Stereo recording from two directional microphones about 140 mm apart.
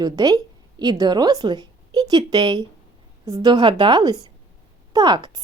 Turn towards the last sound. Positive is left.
turn(degrees=-30)  # may be behind; listen again after turning